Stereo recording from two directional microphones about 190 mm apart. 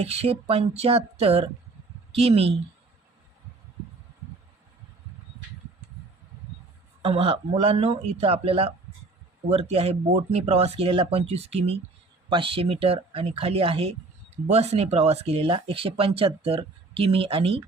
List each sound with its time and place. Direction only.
0.0 s speech: 35° right (ahead or behind)
7.0 s speech: 30° right (ahead or behind)